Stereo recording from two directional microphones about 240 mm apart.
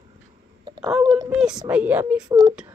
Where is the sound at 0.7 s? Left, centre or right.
Centre.